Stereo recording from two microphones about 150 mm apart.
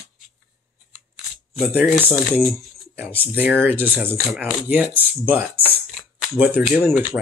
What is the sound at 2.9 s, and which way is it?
Speech, 15° right (ahead or behind).